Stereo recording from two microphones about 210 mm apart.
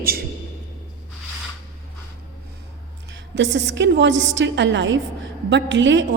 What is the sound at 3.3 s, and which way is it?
A woman's voice, 55° right (ahead or behind).